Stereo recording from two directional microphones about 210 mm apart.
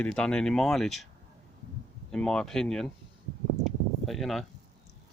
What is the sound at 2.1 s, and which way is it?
Speech, 5° left (ahead or behind).